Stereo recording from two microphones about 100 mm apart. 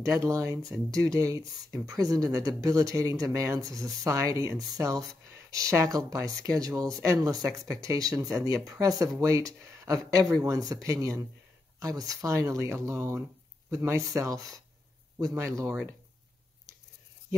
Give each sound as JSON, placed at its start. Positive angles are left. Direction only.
{"t": 0.0, "sound": "speech", "side_deg": -30}